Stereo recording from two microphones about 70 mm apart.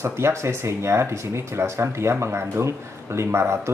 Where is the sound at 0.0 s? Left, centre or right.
Right.